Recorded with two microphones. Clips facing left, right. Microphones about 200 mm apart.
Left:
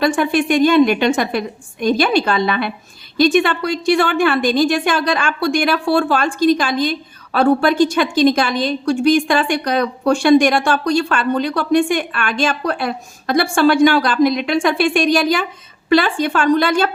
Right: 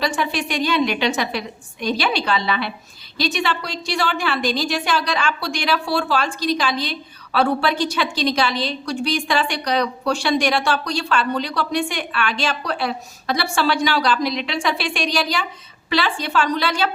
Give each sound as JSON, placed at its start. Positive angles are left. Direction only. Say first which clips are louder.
{"t": 0.2, "sound": "a woman's voice", "louder": "left 9 dB", "side_deg": 50}